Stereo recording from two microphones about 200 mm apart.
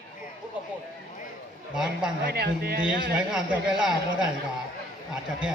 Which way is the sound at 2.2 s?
50° right (ahead or behind).